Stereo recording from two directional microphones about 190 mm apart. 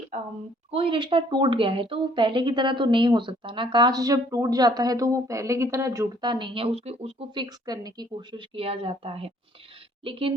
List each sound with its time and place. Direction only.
0.7 s speech: 30° right (ahead or behind)